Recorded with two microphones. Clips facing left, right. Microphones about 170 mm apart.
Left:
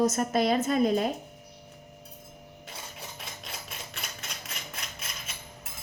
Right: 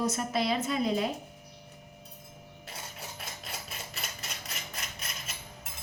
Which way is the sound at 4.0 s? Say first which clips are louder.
Even; centre (ahead or behind).